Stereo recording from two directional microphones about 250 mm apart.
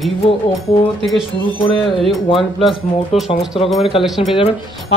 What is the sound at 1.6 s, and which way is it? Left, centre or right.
Speech, left.